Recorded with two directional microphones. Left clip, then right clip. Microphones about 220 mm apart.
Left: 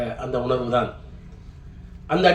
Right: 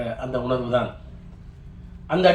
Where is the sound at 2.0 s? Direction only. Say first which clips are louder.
Even; 55° left (ahead or behind).